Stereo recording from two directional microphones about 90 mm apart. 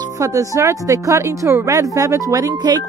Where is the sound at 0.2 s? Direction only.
35° right (ahead or behind).